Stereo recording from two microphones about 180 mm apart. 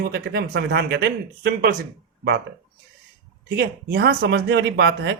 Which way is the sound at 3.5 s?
60° right (ahead or behind).